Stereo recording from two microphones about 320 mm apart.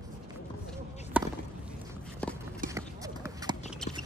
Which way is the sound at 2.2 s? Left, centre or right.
Centre.